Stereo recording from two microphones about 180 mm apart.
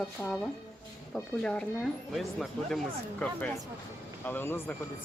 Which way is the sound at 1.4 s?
5° left (ahead or behind).